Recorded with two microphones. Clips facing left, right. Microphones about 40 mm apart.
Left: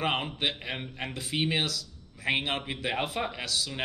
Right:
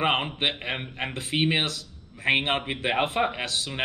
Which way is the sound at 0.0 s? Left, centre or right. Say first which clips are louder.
Right 4 dB; right.